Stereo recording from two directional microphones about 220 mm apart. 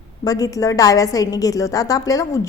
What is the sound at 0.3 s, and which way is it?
A woman's voice, 15° left (ahead or behind).